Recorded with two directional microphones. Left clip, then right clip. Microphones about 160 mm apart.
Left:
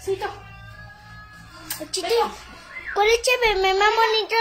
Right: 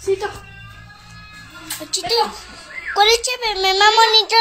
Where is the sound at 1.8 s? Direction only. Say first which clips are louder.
Right 3 dB; 20° left (ahead or behind).